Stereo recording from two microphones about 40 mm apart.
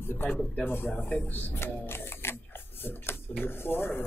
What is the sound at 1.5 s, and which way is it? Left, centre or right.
Speech, left.